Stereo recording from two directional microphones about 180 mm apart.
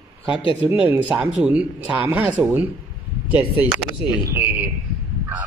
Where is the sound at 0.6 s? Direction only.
10° right (ahead or behind).